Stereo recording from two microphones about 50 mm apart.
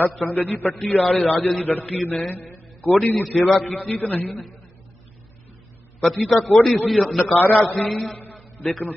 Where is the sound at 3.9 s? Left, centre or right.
Left.